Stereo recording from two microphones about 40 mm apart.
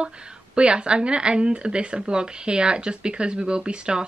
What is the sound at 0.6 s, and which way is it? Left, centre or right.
Speech, right.